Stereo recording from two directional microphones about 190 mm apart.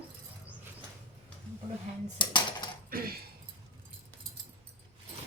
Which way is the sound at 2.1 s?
25° left (ahead or behind).